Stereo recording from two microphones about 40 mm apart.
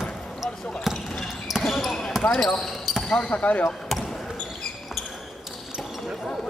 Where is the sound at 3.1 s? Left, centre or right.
Left.